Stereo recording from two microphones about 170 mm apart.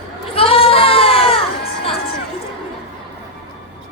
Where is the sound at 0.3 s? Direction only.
35° left (ahead or behind).